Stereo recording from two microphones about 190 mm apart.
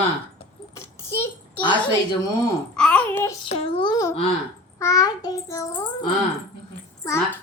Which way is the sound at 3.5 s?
30° left (ahead or behind).